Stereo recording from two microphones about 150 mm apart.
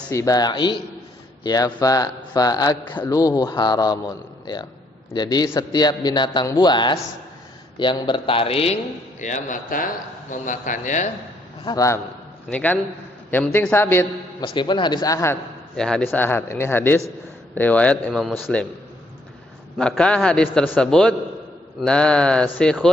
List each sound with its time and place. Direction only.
0.1 s a man's voice: 20° left (ahead or behind); by 8.8 s 40° left (ahead or behind)
9.2 s speech: 60° left (ahead or behind)
11.6 s a man's voice: 25° left (ahead or behind)
12.5 s a man's voice: 10° left (ahead or behind)
14.4 s a man's voice: 30° left (ahead or behind)
15.7 s a man's voice: 5° left (ahead or behind)
19.8 s a man's voice: 5° left (ahead or behind)